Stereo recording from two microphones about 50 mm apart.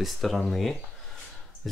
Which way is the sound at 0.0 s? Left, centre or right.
Centre.